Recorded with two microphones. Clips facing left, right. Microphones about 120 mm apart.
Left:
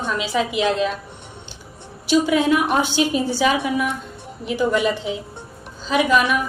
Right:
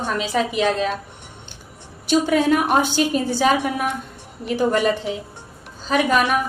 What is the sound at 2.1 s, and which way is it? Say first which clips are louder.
A woman's voice: even; 45° right (ahead or behind).